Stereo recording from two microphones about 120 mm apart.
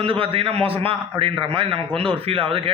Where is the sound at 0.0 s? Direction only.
50° right (ahead or behind).